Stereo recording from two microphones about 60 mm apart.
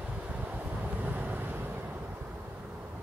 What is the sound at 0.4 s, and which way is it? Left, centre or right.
Vehicle, right.